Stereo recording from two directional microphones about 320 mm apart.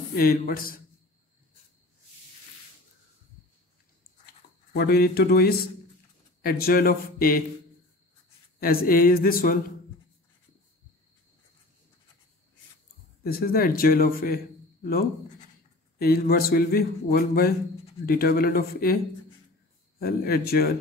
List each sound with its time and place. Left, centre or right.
0.1 s speech: left
4.7 s speech: left
8.5 s speech: left
13.2 s a man's voice: left
20.0 s speech: left